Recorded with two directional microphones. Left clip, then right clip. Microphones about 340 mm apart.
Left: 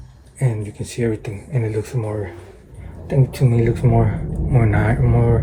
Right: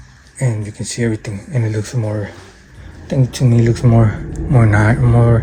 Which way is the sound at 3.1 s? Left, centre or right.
Right.